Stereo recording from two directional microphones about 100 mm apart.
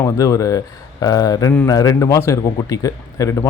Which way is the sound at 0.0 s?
35° left (ahead or behind).